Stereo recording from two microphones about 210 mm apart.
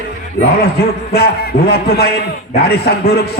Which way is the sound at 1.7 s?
50° left (ahead or behind).